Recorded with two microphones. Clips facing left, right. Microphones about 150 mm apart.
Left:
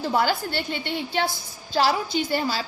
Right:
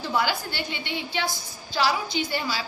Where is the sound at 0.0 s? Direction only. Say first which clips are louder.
Left 3 dB; 45° left (ahead or behind).